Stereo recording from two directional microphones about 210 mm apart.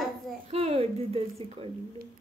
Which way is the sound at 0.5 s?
30° right (ahead or behind).